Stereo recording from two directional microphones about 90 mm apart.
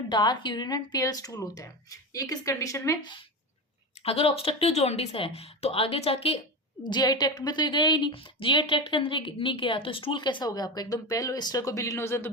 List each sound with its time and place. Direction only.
0.1 s a woman's voice: 55° left (ahead or behind); by 3.0 s 35° left (ahead or behind)
4.0 s speech: 90° left
6.9 s a woman's voice: 50° left (ahead or behind); by 12.3 s 30° left (ahead or behind)